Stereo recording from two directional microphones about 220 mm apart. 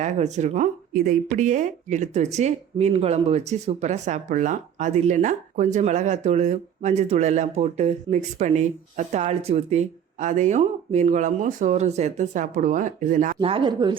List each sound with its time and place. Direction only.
0.0 s speech: 30° right (ahead or behind)